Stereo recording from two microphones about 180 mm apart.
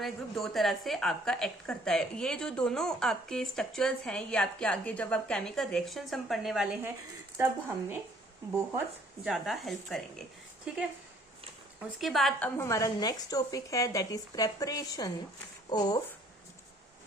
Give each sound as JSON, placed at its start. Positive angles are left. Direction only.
{"t": 0.0, "sound": "a woman's voice", "side_deg": 0}
{"t": 9.2, "sound": "a woman's voice", "side_deg": 0}
{"t": 11.8, "sound": "a woman's voice", "side_deg": 0}
{"t": 12.5, "sound": "speech", "side_deg": 15}